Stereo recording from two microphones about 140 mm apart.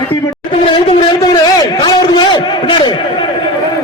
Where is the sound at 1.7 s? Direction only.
30° left (ahead or behind).